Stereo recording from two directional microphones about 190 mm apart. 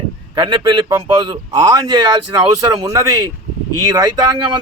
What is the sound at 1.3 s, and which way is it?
A man's voice, 20° right (ahead or behind).